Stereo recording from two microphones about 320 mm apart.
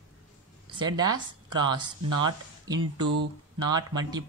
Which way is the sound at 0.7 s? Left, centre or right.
Centre.